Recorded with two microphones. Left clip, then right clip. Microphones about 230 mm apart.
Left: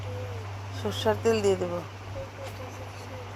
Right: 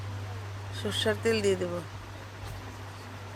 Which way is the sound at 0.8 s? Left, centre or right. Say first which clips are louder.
Left 2 dB; right.